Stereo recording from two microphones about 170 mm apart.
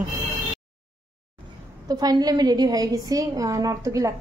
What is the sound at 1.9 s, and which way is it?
A woman's voice, 20° right (ahead or behind).